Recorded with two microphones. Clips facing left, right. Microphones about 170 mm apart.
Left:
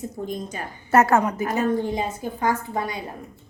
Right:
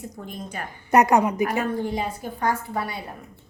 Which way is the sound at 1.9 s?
20° left (ahead or behind).